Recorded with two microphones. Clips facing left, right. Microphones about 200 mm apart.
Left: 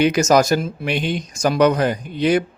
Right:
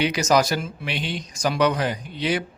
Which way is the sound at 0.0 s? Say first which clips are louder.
Left 5 dB; 45° left (ahead or behind).